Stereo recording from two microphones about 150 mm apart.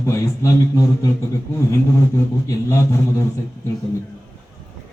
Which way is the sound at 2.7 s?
20° left (ahead or behind).